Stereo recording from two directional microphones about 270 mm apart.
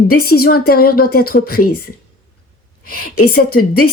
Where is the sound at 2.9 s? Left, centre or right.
Left.